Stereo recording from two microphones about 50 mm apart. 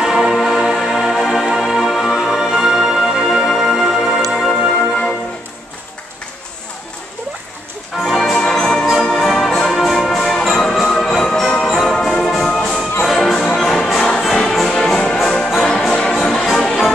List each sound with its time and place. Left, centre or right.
0.0 s music: centre
2.1 s music: centre
4.5 s music: centre
8.0 s music: centre
15.0 s music: centre